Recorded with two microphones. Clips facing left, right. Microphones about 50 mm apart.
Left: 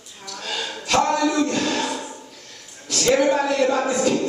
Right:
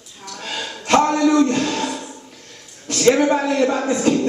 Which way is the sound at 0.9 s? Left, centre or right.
Right.